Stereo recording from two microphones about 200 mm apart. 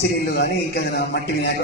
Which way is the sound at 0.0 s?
55° left (ahead or behind).